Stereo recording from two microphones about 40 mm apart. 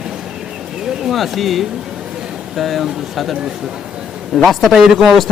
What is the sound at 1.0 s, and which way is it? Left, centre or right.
Speech, centre.